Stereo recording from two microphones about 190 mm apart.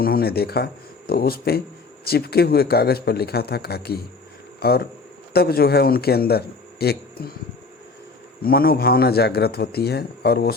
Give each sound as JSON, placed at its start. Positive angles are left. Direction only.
{"t": 0.0, "sound": "a man's voice", "side_deg": 55}
{"t": 8.4, "sound": "speech", "side_deg": 50}